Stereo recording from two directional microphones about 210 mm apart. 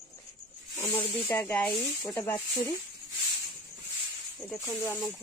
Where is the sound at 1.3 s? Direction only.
5° left (ahead or behind).